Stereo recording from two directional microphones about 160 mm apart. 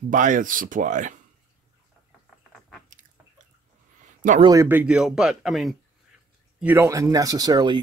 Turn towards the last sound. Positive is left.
turn(degrees=-25)  # may be behind; listen again after turning